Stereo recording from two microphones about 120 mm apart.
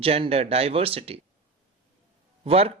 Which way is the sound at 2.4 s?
55° right (ahead or behind).